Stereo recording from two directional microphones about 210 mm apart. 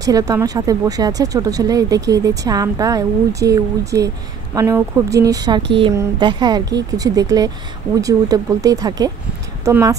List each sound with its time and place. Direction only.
0.0 s a woman's voice: 15° right (ahead or behind)